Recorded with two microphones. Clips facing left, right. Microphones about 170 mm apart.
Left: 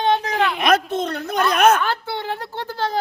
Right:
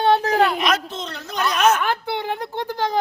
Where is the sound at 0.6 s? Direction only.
55° left (ahead or behind).